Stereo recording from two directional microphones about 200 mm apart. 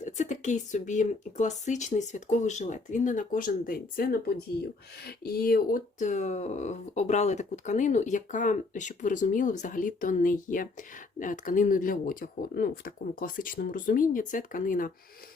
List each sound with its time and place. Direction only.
0.0 s speech: 35° left (ahead or behind)